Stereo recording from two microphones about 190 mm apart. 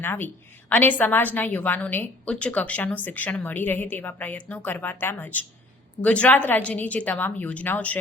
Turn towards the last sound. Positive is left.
turn(degrees=10)  # may be behind; listen again after turning